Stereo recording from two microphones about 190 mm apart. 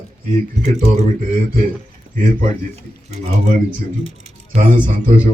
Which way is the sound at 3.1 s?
40° right (ahead or behind).